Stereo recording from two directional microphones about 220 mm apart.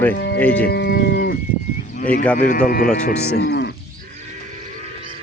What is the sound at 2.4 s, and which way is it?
Speech, 40° left (ahead or behind).